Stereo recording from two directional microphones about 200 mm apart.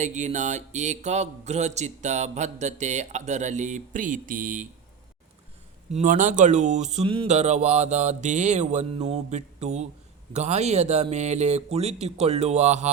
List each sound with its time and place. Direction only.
0.0 s mantra: 35° right (ahead or behind)
5.9 s mantra: 40° right (ahead or behind)